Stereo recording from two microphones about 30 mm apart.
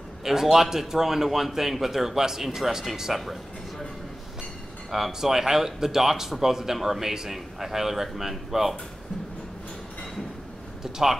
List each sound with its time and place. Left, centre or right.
0.2 s a man's voice: centre
4.9 s a man's voice: centre
10.8 s speech: centre